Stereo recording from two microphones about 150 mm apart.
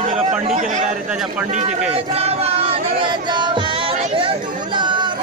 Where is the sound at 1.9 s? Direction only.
40° right (ahead or behind).